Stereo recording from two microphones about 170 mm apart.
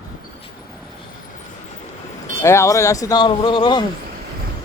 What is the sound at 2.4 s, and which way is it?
Speech, 15° left (ahead or behind).